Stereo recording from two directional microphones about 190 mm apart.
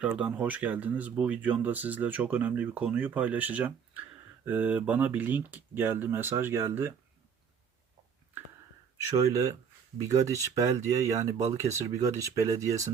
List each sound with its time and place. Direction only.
0.0 s speech: 5° right (ahead or behind)
9.0 s speech: 15° right (ahead or behind)